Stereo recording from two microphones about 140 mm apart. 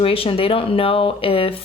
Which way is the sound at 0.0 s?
40° left (ahead or behind).